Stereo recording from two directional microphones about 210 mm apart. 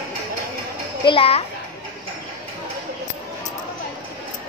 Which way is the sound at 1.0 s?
25° left (ahead or behind).